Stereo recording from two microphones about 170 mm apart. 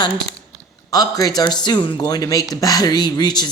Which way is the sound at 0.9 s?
20° left (ahead or behind).